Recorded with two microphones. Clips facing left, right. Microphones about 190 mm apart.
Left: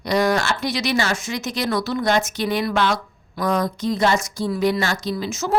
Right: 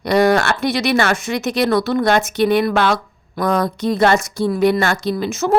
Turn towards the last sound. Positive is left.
turn(degrees=-60)  # may be behind; listen again after turning